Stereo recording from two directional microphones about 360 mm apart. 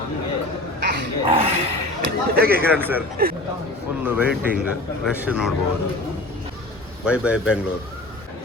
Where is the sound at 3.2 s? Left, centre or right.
Right.